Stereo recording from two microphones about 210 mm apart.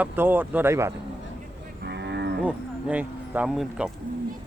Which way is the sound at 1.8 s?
55° right (ahead or behind).